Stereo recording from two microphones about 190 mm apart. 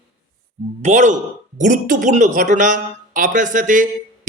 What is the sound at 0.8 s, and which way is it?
A man's voice, 40° right (ahead or behind).